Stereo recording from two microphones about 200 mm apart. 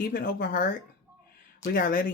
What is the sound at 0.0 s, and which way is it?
Speech, 45° left (ahead or behind).